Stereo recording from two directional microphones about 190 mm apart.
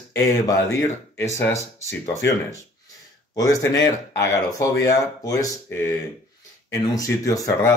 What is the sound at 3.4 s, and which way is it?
Speech, 20° left (ahead or behind).